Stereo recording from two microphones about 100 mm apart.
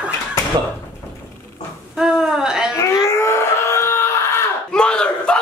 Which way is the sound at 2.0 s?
5° right (ahead or behind).